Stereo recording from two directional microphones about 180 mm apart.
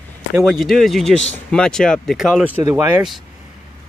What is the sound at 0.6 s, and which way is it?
Speech, centre (ahead or behind).